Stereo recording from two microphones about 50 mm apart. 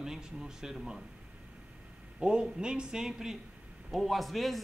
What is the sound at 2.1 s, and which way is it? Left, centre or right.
Speech, centre.